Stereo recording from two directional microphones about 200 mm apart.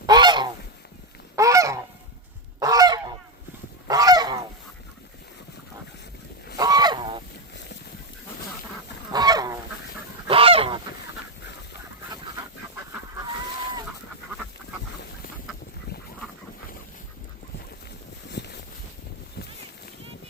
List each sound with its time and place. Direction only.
0.0 s goose: 20° right (ahead or behind)
6.6 s fowl: 20° right (ahead or behind)
9.1 s goose: 20° right (ahead or behind)
18.3 s boat: 55° left (ahead or behind)